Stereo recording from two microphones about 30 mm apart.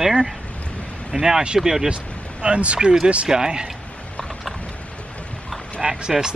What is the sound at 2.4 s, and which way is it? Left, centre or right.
Speech, right.